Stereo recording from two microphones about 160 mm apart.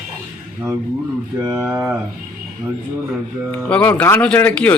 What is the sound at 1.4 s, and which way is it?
Speech, 15° right (ahead or behind).